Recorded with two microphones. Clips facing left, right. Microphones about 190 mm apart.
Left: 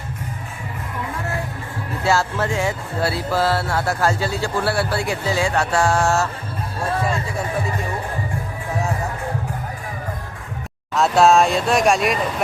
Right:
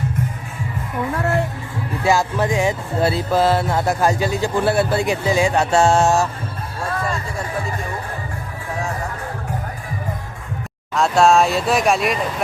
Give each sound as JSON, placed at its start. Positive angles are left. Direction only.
{"t": 2.0, "sound": "music", "side_deg": -15}
{"t": 10.9, "sound": "speech", "side_deg": 0}